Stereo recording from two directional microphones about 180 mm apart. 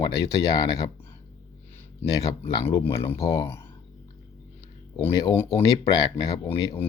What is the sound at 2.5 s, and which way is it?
Speech, 30° left (ahead or behind).